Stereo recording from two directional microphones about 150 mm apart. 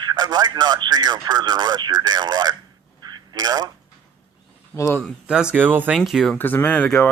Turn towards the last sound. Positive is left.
turn(degrees=10)  # may be behind; listen again after turning